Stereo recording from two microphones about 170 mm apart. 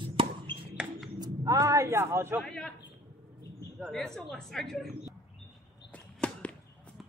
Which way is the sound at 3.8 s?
Centre (ahead or behind).